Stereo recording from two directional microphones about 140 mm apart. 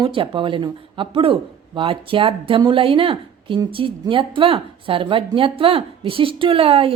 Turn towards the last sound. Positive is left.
turn(degrees=-40)  # may be behind; listen again after turning